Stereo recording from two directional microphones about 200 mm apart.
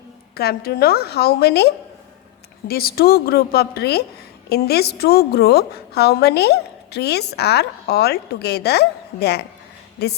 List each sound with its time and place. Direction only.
0.3 s a woman's voice: 50° left (ahead or behind)